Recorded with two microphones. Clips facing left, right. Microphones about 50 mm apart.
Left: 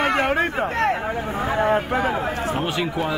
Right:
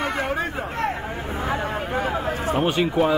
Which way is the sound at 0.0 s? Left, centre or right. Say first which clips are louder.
Left 5 dB; left.